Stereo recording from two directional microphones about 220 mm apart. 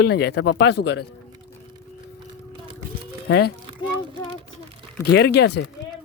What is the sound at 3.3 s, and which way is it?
Speech, 45° left (ahead or behind).